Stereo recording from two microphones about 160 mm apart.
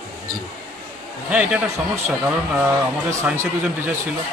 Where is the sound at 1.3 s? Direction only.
10° right (ahead or behind).